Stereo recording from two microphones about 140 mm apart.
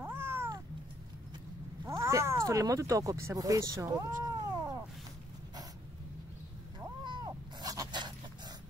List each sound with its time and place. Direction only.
0.0 s cat: 15° right (ahead or behind)
1.9 s speech: 20° right (ahead or behind)
6.8 s cat: 30° right (ahead or behind)